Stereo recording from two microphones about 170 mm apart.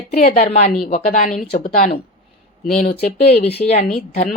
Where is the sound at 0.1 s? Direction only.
45° left (ahead or behind).